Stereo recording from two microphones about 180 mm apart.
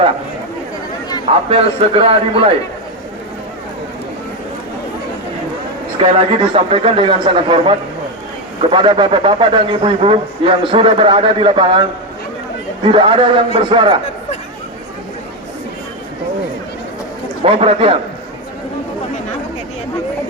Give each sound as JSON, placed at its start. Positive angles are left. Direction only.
{"t": 1.5, "sound": "a man's voice", "side_deg": -30}
{"t": 6.1, "sound": "a man's voice", "side_deg": -30}
{"t": 17.4, "sound": "a man's voice", "side_deg": -30}